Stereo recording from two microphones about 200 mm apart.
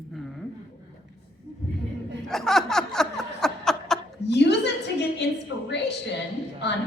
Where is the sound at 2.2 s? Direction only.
Centre (ahead or behind).